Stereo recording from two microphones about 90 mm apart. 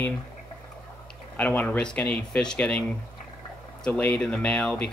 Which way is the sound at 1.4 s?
15° left (ahead or behind).